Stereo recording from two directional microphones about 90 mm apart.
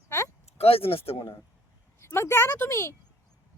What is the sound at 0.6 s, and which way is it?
Speech, 90° left.